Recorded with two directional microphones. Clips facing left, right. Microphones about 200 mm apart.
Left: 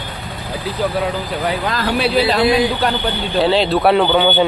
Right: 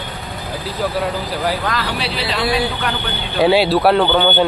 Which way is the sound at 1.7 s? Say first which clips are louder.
Left 7 dB; 45° left (ahead or behind).